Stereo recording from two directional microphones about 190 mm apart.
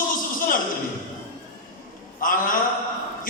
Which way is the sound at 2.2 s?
45° left (ahead or behind).